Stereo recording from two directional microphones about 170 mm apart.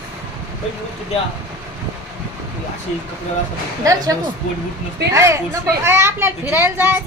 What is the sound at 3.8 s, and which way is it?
A child's voice, 20° right (ahead or behind).